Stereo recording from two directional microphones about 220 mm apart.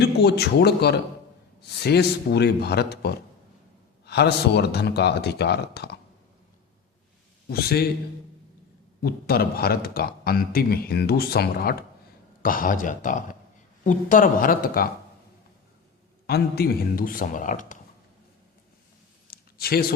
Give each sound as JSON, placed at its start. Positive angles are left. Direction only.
{"t": 0.0, "sound": "a man's voice", "side_deg": 45}
{"t": 7.4, "sound": "a man's voice", "side_deg": 45}
{"t": 9.0, "sound": "a man's voice", "side_deg": 45}
{"t": 16.2, "sound": "speech", "side_deg": 45}
{"t": 19.3, "sound": "a sound", "side_deg": 45}